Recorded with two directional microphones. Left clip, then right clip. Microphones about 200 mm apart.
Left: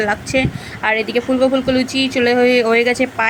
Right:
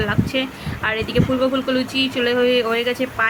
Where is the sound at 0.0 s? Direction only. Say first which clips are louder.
Left 5 dB; 20° left (ahead or behind).